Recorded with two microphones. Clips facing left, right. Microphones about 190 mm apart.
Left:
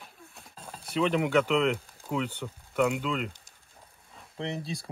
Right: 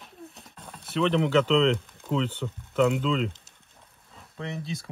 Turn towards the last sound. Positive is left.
turn(degrees=30)  # may be behind; listen again after turning